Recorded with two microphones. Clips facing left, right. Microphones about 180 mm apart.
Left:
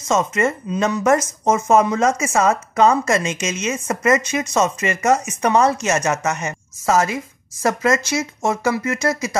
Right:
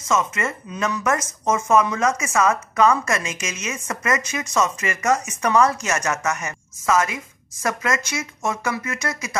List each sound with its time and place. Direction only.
0.0 s speech: 30° left (ahead or behind)